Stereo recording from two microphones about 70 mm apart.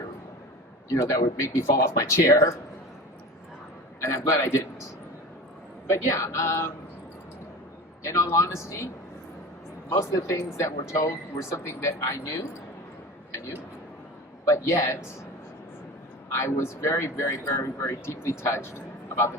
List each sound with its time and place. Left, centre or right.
0.9 s speech: left
4.0 s a man's voice: left
5.9 s speech: left
8.0 s speech: left
10.0 s speech: left
14.4 s speech: left
16.4 s speech: left